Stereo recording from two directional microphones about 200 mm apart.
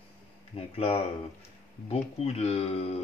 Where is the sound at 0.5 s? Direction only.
30° left (ahead or behind).